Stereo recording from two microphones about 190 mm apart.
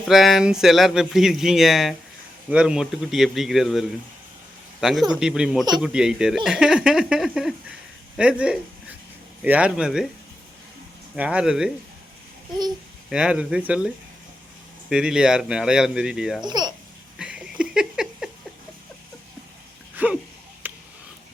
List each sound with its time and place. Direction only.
0.1 s speech: centre (ahead or behind)
11.1 s speech: 5° right (ahead or behind)
13.1 s speech: 5° right (ahead or behind)
16.4 s speech: 20° right (ahead or behind)
17.2 s a sound: 5° right (ahead or behind)
20.0 s a sound: 10° right (ahead or behind)